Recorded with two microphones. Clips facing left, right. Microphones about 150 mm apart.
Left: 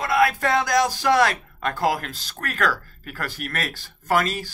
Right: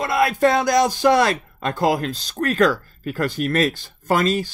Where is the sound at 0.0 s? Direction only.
25° right (ahead or behind).